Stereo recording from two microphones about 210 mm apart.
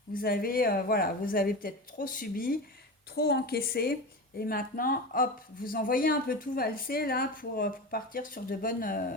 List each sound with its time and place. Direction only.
0.1 s speech: 45° left (ahead or behind)